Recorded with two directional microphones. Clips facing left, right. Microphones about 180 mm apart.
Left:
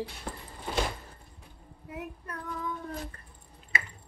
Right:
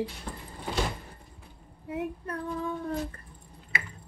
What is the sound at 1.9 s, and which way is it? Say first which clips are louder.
Female singing: right 7 dB; 30° right (ahead or behind).